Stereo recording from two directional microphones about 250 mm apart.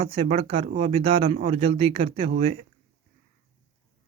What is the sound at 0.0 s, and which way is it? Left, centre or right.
Speech, right.